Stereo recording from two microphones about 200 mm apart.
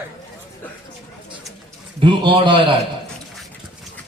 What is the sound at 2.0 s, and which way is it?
Speech, 25° right (ahead or behind).